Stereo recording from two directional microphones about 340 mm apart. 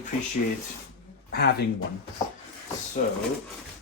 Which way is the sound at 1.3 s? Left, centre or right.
Left.